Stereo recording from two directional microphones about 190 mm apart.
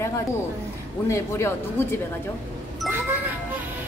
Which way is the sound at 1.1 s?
15° left (ahead or behind).